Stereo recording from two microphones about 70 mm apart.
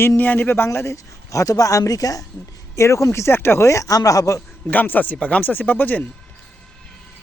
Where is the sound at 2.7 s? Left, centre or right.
Left.